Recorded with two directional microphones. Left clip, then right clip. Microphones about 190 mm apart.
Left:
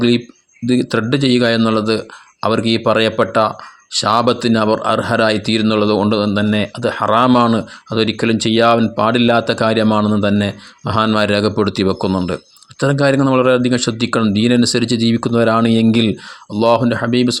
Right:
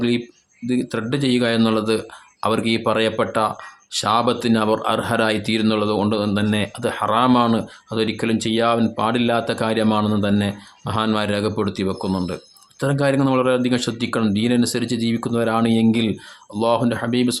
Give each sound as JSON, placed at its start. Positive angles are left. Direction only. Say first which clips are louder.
{"t": 0.7, "sound": "speech", "louder": "left 7 dB", "side_deg": 30}